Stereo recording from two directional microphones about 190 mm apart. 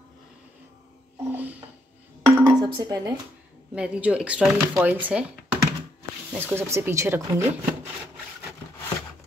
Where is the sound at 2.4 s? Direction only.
20° right (ahead or behind).